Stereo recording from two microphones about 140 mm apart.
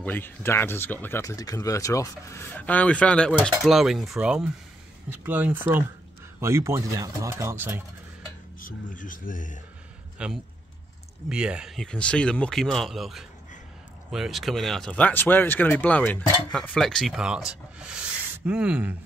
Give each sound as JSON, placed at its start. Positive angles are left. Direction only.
{"t": 0.0, "sound": "speech", "side_deg": 15}
{"t": 8.5, "sound": "speech", "side_deg": 75}
{"t": 10.1, "sound": "speech", "side_deg": -5}